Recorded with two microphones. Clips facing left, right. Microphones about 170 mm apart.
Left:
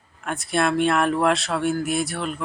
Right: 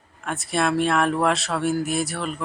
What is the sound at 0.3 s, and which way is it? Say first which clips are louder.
Speech: left 1 dB; centre (ahead or behind).